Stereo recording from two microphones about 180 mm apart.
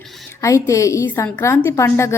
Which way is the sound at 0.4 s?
15° left (ahead or behind).